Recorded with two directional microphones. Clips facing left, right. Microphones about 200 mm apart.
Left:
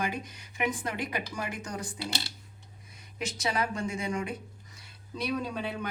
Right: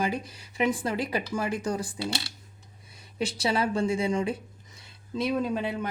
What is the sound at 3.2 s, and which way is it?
A woman's voice, 30° right (ahead or behind).